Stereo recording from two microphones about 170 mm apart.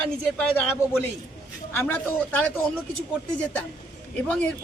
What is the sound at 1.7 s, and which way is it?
Speech, 10° left (ahead or behind).